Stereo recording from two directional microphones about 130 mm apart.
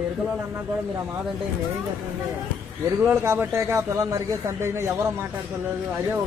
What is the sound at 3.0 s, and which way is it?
Speech, 20° right (ahead or behind).